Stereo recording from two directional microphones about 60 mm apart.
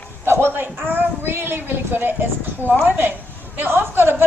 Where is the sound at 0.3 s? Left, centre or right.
Right.